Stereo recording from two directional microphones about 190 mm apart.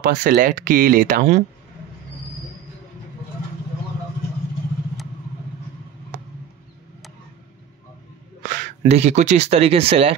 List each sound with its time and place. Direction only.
0.0 s speech: 45° right (ahead or behind)
8.4 s speech: 45° right (ahead or behind); by 10.1 s 30° right (ahead or behind)